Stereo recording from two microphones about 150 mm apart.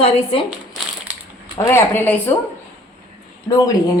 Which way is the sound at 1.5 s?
20° left (ahead or behind).